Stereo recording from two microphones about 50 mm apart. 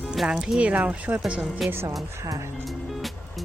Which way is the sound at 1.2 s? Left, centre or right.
Centre.